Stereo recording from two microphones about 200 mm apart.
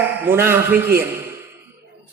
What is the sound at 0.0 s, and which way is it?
Speech, 10° right (ahead or behind).